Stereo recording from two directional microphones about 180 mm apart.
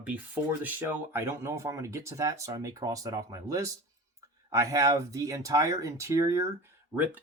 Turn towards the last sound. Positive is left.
turn(degrees=-10)  # may be behind; listen again after turning